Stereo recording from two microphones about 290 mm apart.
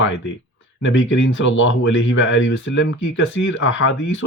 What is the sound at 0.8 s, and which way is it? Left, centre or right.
Speech, left.